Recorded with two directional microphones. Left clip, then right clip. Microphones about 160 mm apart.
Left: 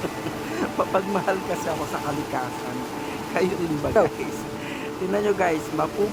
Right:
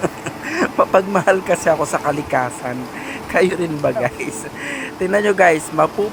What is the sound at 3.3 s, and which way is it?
Speech, 30° right (ahead or behind).